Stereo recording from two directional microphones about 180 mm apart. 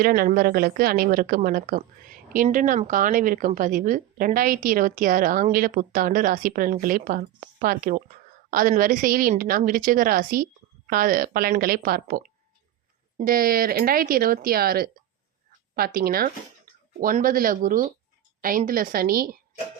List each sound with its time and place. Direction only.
0.0 s a woman's voice: 55° right (ahead or behind)